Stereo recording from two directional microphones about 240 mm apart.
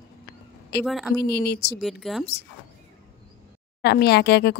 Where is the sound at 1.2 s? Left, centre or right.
Left.